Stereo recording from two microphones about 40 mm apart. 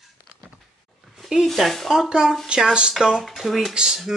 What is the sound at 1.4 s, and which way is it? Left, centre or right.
Speech, centre.